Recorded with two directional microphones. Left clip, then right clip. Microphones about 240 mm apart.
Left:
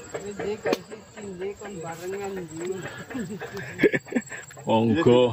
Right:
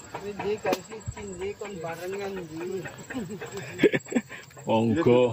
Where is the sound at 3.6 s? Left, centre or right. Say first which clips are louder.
Left 1 dB; centre.